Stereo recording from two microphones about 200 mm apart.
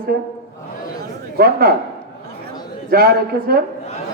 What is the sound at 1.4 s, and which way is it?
Speech, 50° right (ahead or behind).